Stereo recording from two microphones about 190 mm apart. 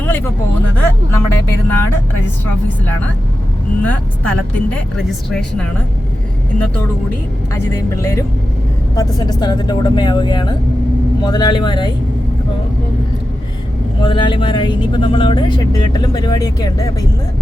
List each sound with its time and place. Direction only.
0.0 s a sound: 10° left (ahead or behind)
0.8 s speech: 10° left (ahead or behind)
3.8 s speech: 5° left (ahead or behind)
7.5 s speech: 15° left (ahead or behind)
14.0 s speech: 25° left (ahead or behind)